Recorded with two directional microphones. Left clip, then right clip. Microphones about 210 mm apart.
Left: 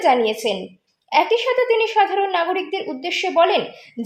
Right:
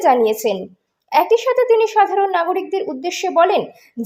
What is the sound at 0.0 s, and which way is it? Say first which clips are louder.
A woman's voice: right 3 dB; 30° right (ahead or behind).